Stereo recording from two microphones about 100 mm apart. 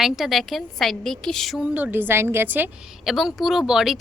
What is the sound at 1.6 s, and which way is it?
A woman's voice, 15° right (ahead or behind).